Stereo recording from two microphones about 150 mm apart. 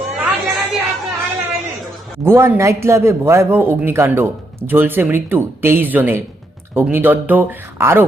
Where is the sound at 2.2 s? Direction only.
15° right (ahead or behind).